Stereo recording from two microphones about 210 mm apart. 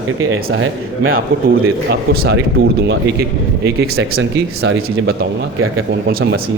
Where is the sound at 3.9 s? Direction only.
75° right (ahead or behind).